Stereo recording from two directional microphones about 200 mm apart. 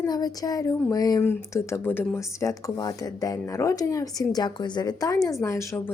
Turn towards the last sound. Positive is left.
turn(degrees=15)  # may be behind; listen again after turning